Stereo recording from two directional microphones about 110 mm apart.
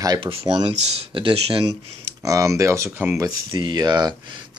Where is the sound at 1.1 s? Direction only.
55° right (ahead or behind).